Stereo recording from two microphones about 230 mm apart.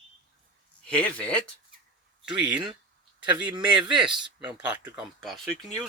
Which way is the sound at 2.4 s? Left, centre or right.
Centre.